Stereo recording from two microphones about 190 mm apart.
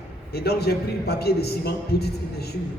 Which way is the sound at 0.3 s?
55° left (ahead or behind).